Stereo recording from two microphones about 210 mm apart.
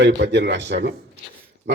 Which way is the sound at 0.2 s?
55° right (ahead or behind).